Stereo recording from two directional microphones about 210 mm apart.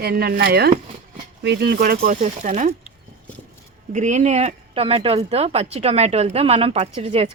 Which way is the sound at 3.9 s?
35° right (ahead or behind).